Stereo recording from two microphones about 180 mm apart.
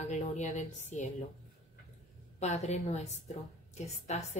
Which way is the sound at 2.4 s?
40° left (ahead or behind).